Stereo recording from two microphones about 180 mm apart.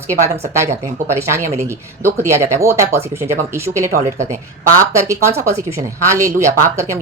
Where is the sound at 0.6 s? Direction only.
15° right (ahead or behind).